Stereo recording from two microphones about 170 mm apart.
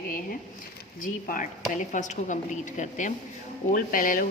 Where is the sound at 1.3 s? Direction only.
50° left (ahead or behind).